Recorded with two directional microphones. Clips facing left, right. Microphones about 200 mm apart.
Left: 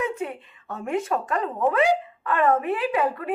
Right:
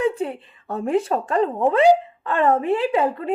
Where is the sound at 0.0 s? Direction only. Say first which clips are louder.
Right 6 dB; 30° right (ahead or behind).